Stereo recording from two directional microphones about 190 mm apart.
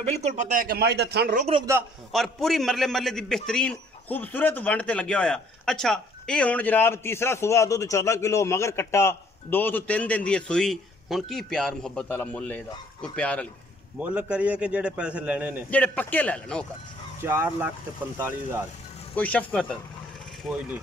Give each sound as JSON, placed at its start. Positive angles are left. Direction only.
{"t": 0.0, "sound": "speech", "side_deg": -35}
{"t": 2.1, "sound": "a man's voice", "side_deg": 0}
{"t": 13.9, "sound": "a man's voice", "side_deg": -5}
{"t": 15.7, "sound": "a man's voice", "side_deg": 10}
{"t": 17.2, "sound": "a man's voice", "side_deg": -10}
{"t": 19.1, "sound": "a man's voice", "side_deg": 5}